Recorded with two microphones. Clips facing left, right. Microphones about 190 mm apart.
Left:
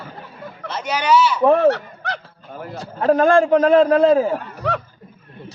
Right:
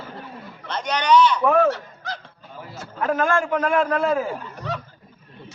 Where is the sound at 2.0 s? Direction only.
70° left (ahead or behind).